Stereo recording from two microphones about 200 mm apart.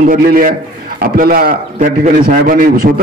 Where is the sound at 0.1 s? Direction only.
45° right (ahead or behind).